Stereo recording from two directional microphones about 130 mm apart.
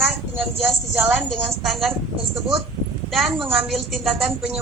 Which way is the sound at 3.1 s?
Centre (ahead or behind).